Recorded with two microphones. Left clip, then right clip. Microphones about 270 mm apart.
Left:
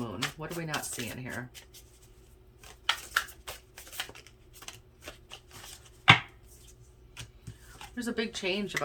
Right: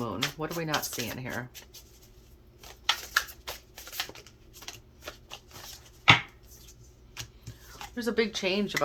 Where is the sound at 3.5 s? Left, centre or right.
Centre.